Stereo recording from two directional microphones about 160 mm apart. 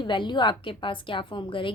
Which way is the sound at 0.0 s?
30° left (ahead or behind).